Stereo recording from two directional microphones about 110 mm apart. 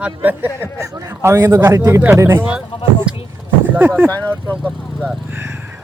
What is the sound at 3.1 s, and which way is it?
Vehicle, 10° right (ahead or behind).